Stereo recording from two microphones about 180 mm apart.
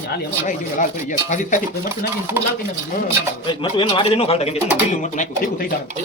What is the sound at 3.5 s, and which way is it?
A man's voice, 30° left (ahead or behind).